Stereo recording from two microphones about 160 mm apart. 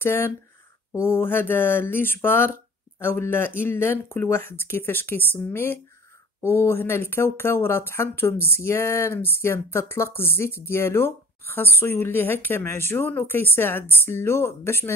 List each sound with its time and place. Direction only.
0.0 s speech: 15° left (ahead or behind)